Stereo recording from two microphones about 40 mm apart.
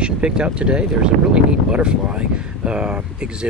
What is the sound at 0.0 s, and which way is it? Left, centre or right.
Speech, right.